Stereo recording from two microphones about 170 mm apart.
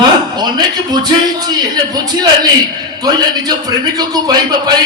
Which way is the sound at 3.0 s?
25° right (ahead or behind).